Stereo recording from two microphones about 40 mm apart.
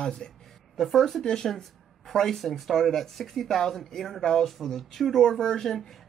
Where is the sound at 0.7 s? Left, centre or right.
Centre.